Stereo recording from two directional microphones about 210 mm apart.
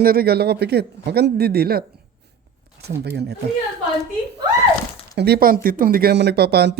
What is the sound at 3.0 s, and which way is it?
Speech, 50° right (ahead or behind).